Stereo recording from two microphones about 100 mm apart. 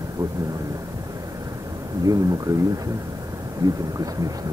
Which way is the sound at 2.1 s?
35° right (ahead or behind).